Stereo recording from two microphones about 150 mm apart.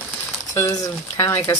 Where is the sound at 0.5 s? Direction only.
25° left (ahead or behind).